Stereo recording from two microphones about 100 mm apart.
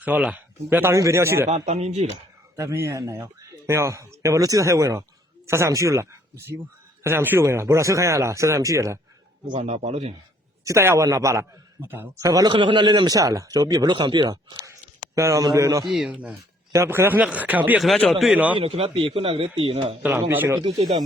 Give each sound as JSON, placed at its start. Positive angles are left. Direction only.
{"t": 0.0, "sound": "speech", "side_deg": -15}
{"t": 1.5, "sound": "speech", "side_deg": -90}
{"t": 2.6, "sound": "speech", "side_deg": -30}
{"t": 9.6, "sound": "speech", "side_deg": -90}
{"t": 10.7, "sound": "speech", "side_deg": -30}
{"t": 12.2, "sound": "speech", "side_deg": -40}
{"t": 12.5, "sound": "speech", "side_deg": -55}
{"t": 15.1, "sound": "speech", "side_deg": -30}
{"t": 15.9, "sound": "speech", "side_deg": -5}
{"t": 16.3, "sound": "speech", "side_deg": -25}
{"t": 17.9, "sound": "speech", "side_deg": 5}
{"t": 18.6, "sound": "speech", "side_deg": -85}
{"t": 20.0, "sound": "speech", "side_deg": -15}
{"t": 20.6, "sound": "speech", "side_deg": -55}